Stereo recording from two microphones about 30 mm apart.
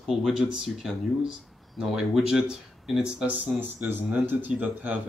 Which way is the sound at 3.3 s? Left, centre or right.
Right.